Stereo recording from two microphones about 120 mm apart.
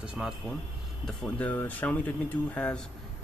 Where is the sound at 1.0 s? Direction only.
10° left (ahead or behind).